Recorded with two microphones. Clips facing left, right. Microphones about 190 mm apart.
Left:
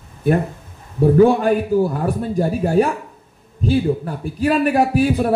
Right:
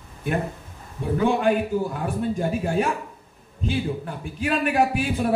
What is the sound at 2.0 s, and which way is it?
Speech, 35° left (ahead or behind).